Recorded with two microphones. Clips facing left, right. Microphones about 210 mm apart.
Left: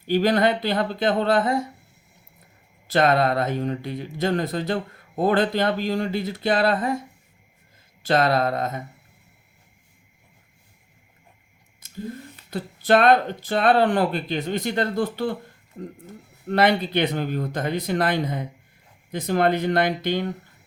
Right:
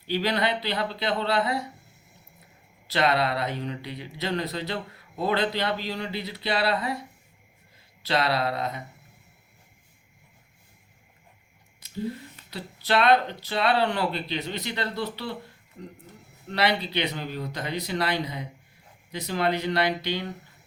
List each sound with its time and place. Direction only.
0.0 s speech: 50° left (ahead or behind)
2.8 s speech: 50° left (ahead or behind)
8.0 s speech: 50° left (ahead or behind)
11.8 s speech: 50° left (ahead or behind)
16.5 s speech: 50° left (ahead or behind)